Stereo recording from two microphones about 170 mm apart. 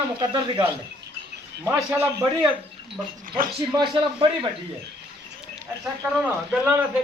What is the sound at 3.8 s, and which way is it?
Speech, 25° right (ahead or behind).